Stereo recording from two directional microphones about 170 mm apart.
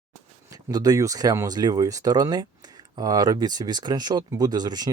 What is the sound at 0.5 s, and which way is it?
Speech, 20° right (ahead or behind).